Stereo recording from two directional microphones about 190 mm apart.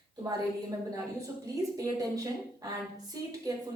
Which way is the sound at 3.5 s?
20° right (ahead or behind).